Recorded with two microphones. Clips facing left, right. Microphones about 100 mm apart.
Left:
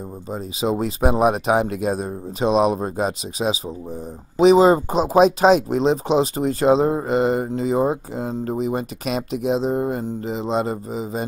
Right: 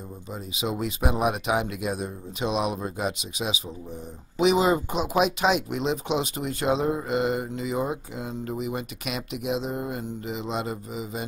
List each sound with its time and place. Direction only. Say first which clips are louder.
0.3 s speech: left 8 dB; 35° left (ahead or behind)